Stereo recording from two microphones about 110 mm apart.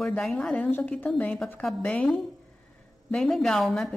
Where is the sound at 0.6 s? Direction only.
15° left (ahead or behind).